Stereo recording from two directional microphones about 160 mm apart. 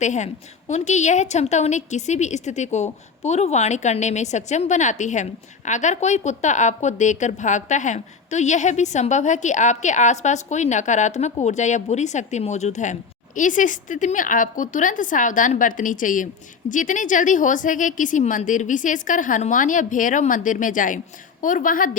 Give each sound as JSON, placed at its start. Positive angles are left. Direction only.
{"t": 0.0, "sound": "a woman's voice", "side_deg": 50}